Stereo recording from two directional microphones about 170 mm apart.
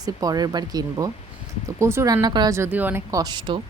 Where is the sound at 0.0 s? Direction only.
20° right (ahead or behind).